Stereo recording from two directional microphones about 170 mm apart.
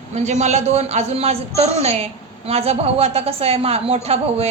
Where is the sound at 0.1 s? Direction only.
40° right (ahead or behind).